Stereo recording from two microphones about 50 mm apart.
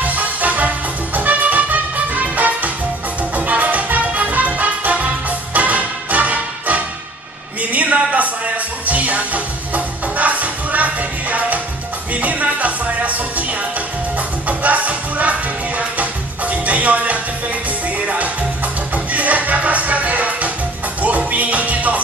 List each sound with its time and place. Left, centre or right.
0.0 s music: right
7.7 s a sound: right
8.8 s music: right